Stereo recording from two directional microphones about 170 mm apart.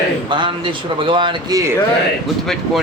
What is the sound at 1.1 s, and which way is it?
Speech, 30° right (ahead or behind).